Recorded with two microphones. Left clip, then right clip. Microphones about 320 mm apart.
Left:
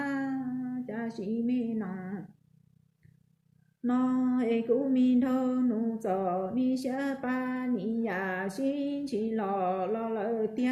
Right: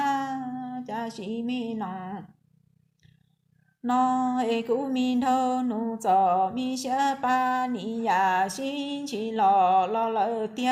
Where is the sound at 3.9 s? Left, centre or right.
Right.